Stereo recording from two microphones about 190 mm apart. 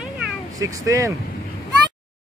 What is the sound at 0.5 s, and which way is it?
Speech, 15° right (ahead or behind).